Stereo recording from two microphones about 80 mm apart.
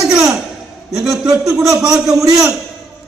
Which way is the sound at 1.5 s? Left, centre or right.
Right.